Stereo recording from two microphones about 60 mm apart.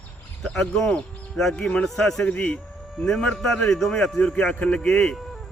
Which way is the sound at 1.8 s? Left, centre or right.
Centre.